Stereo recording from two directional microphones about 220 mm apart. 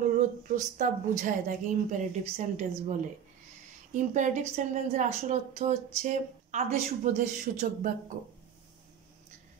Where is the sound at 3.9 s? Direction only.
35° right (ahead or behind).